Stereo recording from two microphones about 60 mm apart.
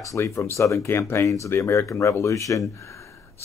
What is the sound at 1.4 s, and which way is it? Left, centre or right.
A man's voice, left.